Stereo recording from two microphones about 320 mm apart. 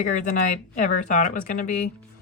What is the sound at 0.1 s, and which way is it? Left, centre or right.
Speech, left.